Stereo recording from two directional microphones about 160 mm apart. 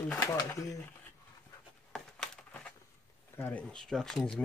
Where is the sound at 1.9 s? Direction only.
5° left (ahead or behind).